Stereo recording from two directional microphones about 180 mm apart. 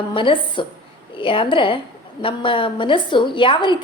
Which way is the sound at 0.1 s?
30° left (ahead or behind).